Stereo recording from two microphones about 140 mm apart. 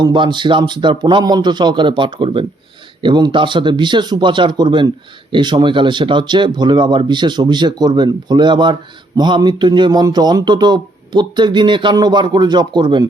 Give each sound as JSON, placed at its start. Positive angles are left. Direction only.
{"t": 0.0, "sound": "speech", "side_deg": -35}